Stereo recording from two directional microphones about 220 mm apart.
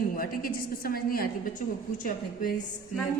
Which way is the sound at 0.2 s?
40° left (ahead or behind).